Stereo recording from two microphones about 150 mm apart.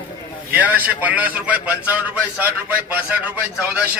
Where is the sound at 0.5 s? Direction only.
10° right (ahead or behind).